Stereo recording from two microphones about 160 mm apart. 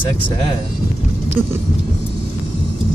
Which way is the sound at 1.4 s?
15° right (ahead or behind).